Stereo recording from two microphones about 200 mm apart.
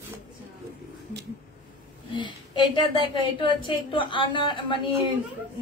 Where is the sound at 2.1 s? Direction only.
25° left (ahead or behind).